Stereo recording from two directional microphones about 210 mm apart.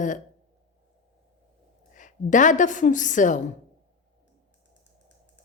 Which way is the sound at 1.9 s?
35° left (ahead or behind).